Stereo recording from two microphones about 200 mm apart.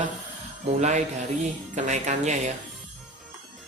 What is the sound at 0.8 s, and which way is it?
Speech, 35° right (ahead or behind).